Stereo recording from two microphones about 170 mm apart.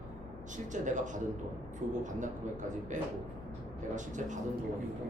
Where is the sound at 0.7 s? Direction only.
45° right (ahead or behind).